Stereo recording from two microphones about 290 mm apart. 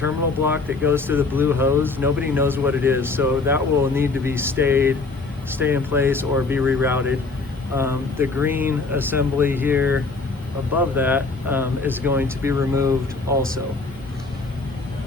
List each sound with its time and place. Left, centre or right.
0.0 s speech: centre